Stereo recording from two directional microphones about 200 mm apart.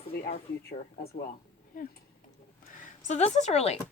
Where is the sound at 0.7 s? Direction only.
50° left (ahead or behind).